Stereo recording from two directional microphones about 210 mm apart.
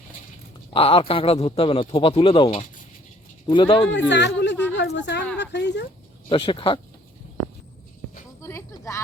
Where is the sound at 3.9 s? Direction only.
55° left (ahead or behind).